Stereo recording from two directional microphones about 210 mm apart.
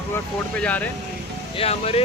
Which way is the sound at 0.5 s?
5° left (ahead or behind).